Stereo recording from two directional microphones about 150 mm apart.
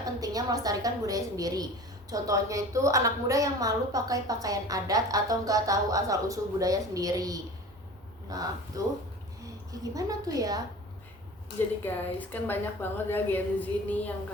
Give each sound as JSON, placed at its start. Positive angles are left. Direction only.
{"t": 0.0, "sound": "a woman's voice", "side_deg": -25}
{"t": 9.9, "sound": "a woman's voice", "side_deg": -25}
{"t": 11.8, "sound": "a woman's voice", "side_deg": 10}